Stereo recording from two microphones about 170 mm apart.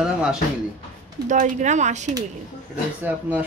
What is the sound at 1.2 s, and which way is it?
Speech, 45° right (ahead or behind).